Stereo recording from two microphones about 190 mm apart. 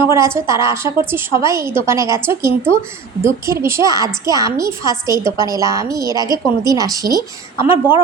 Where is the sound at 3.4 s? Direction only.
15° right (ahead or behind).